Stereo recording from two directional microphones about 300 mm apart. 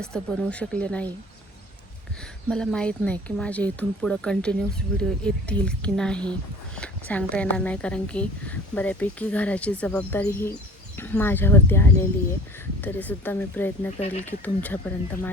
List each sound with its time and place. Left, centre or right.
0.0 s a woman's voice: centre
2.5 s a woman's voice: centre
14.0 s speech: left
14.3 s a woman's voice: centre